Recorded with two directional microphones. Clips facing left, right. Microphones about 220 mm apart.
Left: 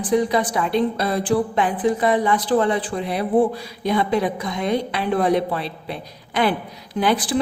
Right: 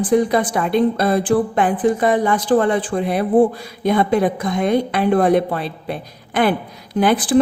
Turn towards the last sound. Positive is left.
turn(degrees=-50)  # may be behind; listen again after turning